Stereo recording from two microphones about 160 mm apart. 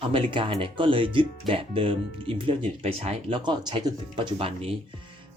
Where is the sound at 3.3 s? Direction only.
30° right (ahead or behind).